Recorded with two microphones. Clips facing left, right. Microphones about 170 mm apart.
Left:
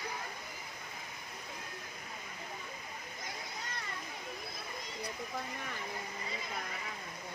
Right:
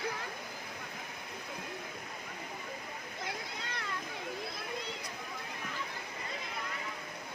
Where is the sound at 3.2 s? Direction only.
70° right (ahead or behind).